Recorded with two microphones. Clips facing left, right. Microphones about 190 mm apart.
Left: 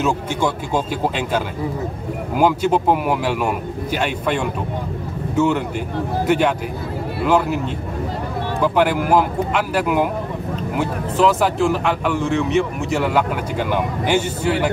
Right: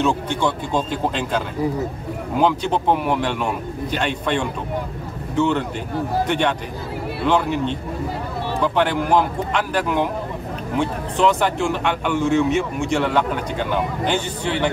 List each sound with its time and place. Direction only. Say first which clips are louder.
0.0 s a man's voice: even; 10° left (ahead or behind)